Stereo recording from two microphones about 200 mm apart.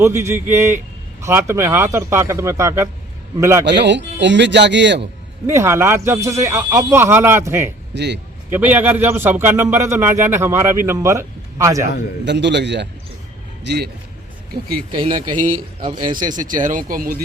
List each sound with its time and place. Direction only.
0.0 s a man's voice: 15° right (ahead or behind)
3.7 s speech: 60° right (ahead or behind)
5.5 s a man's voice: 15° right (ahead or behind)
7.9 s speech: 60° right (ahead or behind)
8.4 s a man's voice: 10° right (ahead or behind)
12.2 s speech: 60° right (ahead or behind)
14.9 s a man's voice: 25° right (ahead or behind)
16.3 s speech: 40° right (ahead or behind)